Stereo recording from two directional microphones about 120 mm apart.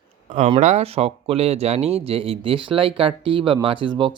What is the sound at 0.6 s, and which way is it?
Speech, 65° right (ahead or behind).